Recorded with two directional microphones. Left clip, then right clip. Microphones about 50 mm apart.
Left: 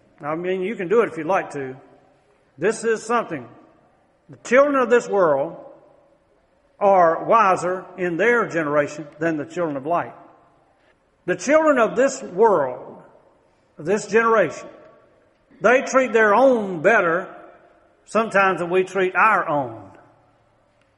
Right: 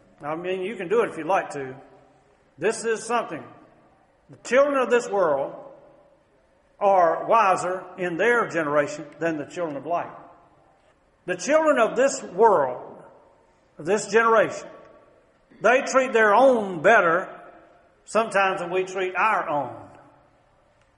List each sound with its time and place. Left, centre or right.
0.2 s a man's voice: left
6.8 s a man's voice: left
11.2 s a man's voice: left
13.7 s a man's voice: left
15.6 s a man's voice: left